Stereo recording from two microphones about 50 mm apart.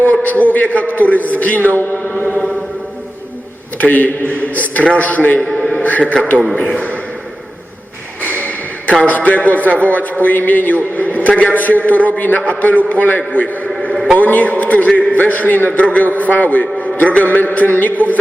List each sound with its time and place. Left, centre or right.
0.0 s a man's voice: left
3.8 s a man's voice: left
5.4 s a man's voice: centre
5.7 s speech: left
6.5 s a man's voice: centre
6.7 s speech: left
8.2 s a sound: left
9.0 s a man's voice: left